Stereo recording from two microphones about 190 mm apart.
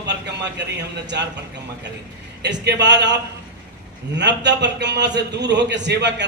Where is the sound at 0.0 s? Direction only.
65° right (ahead or behind).